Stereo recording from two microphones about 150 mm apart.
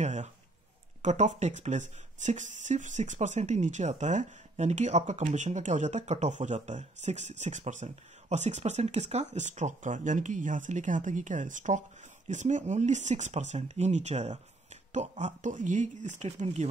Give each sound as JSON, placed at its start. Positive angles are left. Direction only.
{"t": 0.0, "sound": "speech", "side_deg": -50}